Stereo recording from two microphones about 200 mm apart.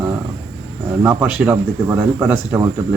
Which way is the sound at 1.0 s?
10° right (ahead or behind).